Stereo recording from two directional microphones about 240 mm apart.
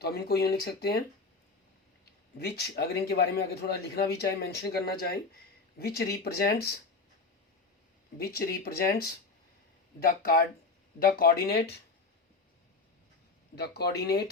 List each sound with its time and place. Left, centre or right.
0.0 s a man's voice: left
2.4 s a man's voice: left
5.8 s a man's voice: left
8.2 s a man's voice: left
13.6 s a man's voice: left